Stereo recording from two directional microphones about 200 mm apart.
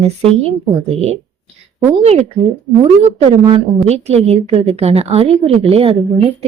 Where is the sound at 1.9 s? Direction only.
30° right (ahead or behind).